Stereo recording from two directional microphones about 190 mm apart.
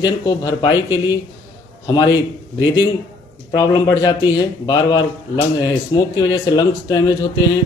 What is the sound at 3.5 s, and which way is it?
Speech, 20° left (ahead or behind).